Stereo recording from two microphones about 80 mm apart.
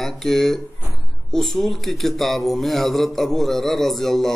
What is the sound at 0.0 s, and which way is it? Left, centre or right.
Mantra, centre.